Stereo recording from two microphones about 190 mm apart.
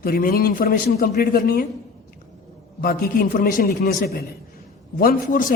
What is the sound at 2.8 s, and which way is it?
A man's voice, 50° left (ahead or behind).